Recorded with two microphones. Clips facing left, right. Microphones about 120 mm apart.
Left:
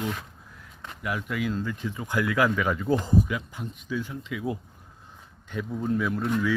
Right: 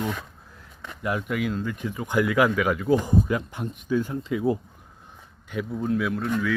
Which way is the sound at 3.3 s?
55° right (ahead or behind).